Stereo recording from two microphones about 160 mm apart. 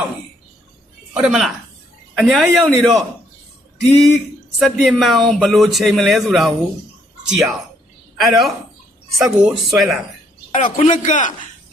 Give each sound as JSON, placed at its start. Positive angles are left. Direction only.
{"t": 1.1, "sound": "speech", "side_deg": -5}
{"t": 10.5, "sound": "a man's voice", "side_deg": 55}